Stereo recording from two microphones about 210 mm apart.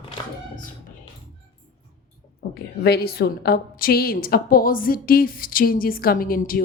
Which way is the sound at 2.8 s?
50° left (ahead or behind).